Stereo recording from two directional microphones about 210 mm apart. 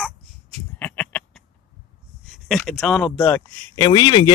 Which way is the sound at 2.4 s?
Centre (ahead or behind).